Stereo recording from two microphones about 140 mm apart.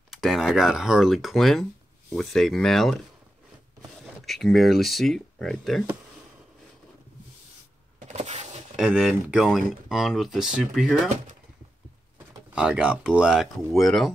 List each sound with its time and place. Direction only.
0.1 s speech: centre (ahead or behind)
4.3 s speech: centre (ahead or behind)
8.1 s power windows: 50° right (ahead or behind)
8.7 s speech: centre (ahead or behind)
12.5 s speech: 5° right (ahead or behind)